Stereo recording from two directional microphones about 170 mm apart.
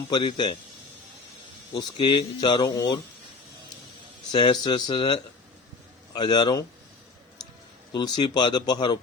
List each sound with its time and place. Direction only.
0.1 s a man's voice: 30° left (ahead or behind)
1.7 s speech: 30° left (ahead or behind)
4.3 s speech: 30° left (ahead or behind)
7.9 s speech: 25° left (ahead or behind)